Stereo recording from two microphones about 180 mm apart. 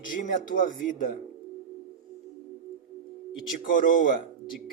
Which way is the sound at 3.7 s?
50° left (ahead or behind).